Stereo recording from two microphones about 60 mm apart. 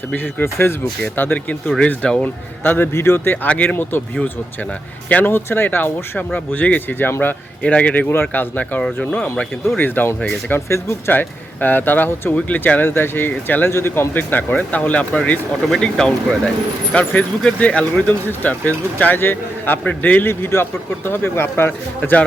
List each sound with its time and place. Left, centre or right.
0.4 s speech: left
1.0 s speech: left
2.6 s speech: left
2.9 s speech: left
3.4 s speech: left
5.0 s speech: left
5.3 s speech: left
8.1 s speech: left
10.5 s speech: left
11.1 s speech: left
12.3 s speech: left
13.7 s speech: left
14.1 s speech: left